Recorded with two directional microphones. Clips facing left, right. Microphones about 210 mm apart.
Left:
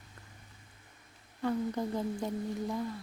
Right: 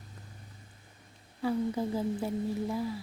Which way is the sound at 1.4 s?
5° right (ahead or behind).